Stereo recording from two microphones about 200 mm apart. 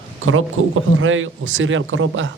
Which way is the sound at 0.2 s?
70° right (ahead or behind).